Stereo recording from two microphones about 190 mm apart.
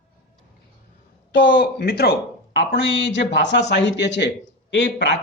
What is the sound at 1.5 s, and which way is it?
Speech, 55° left (ahead or behind).